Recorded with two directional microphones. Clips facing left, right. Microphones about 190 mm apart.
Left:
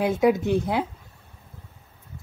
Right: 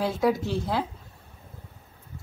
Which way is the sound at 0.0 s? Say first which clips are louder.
Left 4 dB; 20° left (ahead or behind).